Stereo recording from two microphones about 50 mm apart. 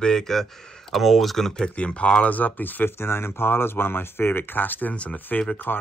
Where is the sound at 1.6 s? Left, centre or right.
Left.